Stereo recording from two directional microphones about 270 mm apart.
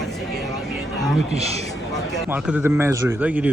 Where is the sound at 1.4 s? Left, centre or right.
Right.